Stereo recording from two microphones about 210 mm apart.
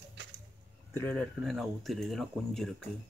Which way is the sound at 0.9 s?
10° left (ahead or behind).